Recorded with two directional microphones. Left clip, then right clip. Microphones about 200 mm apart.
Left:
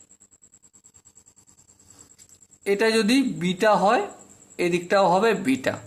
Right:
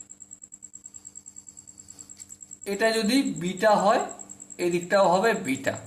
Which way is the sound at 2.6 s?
45° left (ahead or behind).